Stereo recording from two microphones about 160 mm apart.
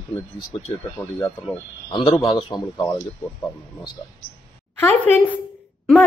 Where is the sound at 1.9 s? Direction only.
30° left (ahead or behind).